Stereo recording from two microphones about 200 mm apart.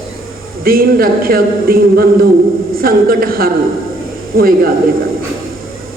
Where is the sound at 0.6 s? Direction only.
45° right (ahead or behind).